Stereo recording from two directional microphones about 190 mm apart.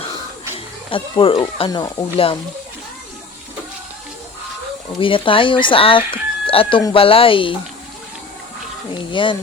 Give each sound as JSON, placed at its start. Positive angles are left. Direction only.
{"t": 0.5, "sound": "speech", "side_deg": 25}
{"t": 4.9, "sound": "speech", "side_deg": 25}
{"t": 8.9, "sound": "speech", "side_deg": 25}